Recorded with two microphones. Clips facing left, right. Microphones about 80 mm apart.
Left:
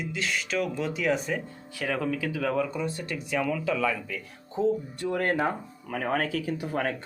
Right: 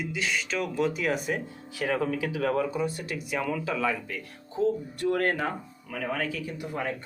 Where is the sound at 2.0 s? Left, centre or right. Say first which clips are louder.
Right 1 dB; centre.